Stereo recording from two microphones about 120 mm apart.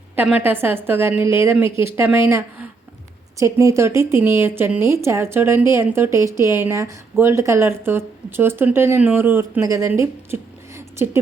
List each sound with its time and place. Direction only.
0.2 s speech: 15° right (ahead or behind)